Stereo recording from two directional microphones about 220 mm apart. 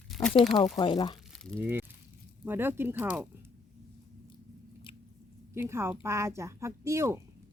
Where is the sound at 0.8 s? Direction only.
20° left (ahead or behind).